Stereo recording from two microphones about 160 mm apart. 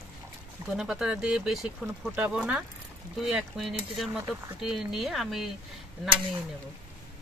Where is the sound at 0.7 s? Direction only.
5° right (ahead or behind).